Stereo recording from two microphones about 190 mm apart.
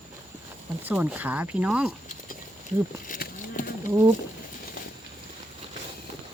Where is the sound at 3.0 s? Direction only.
45° left (ahead or behind).